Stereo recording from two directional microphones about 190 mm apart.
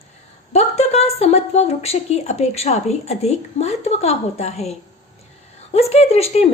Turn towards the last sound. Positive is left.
turn(degrees=35)  # may be behind; listen again after turning